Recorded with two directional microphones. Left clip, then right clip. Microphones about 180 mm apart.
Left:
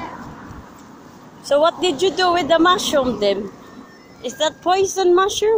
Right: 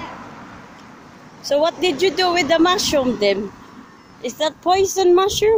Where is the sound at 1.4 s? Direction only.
10° right (ahead or behind).